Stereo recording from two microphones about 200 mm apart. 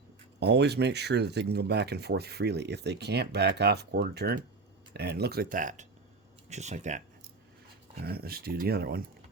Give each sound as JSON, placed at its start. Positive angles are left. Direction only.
{"t": 0.3, "sound": "speech", "side_deg": -55}
{"t": 7.9, "sound": "speech", "side_deg": -50}